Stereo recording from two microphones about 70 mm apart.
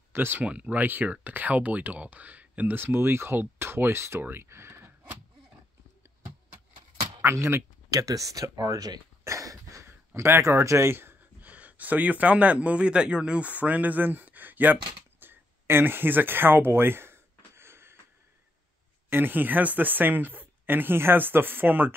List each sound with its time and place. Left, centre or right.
0.1 s speech: right
0.4 s speech: centre; by 4.9 s right
7.2 s speech: right
7.9 s speech: right
9.2 s a sound: right
9.8 s a sound: right
11.5 s speech: right
19.0 s speech: right